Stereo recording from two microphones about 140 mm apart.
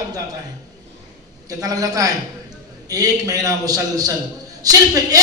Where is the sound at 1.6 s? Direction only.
25° right (ahead or behind).